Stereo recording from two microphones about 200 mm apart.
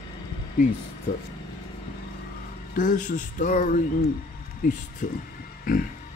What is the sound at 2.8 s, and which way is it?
Speech, 40° left (ahead or behind).